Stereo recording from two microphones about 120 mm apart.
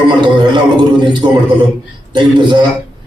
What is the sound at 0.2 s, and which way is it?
A man's voice, 40° right (ahead or behind).